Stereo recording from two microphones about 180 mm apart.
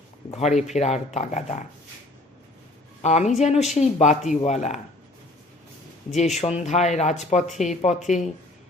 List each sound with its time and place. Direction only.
0.3 s speech: 40° left (ahead or behind)
3.0 s speech: 40° left (ahead or behind)
6.1 s speech: 40° left (ahead or behind)